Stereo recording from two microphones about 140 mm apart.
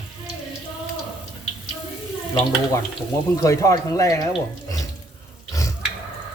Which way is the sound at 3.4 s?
25° left (ahead or behind).